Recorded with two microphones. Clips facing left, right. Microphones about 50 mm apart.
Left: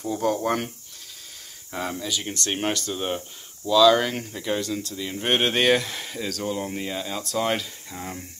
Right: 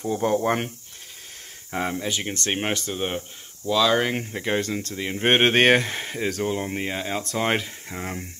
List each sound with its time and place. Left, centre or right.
0.0 s speech: right
1.7 s speech: right
4.3 s speech: right